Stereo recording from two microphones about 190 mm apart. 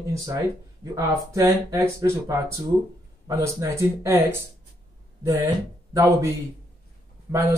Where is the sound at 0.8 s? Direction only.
15° right (ahead or behind).